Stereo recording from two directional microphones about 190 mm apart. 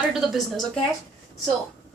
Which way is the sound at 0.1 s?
Centre (ahead or behind).